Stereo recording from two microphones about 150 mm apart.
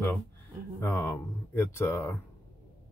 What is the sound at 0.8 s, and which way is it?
Speech, 15° left (ahead or behind).